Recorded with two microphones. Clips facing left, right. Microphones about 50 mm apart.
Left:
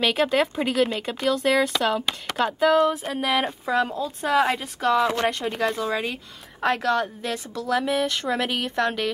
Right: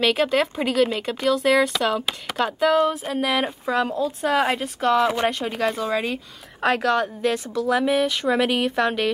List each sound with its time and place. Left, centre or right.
0.0 s speech: centre